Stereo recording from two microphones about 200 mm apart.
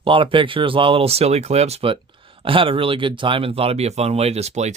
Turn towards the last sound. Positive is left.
turn(degrees=-35)  # may be behind; listen again after turning